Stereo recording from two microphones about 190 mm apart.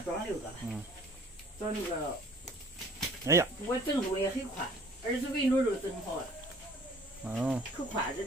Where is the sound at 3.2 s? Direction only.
15° right (ahead or behind).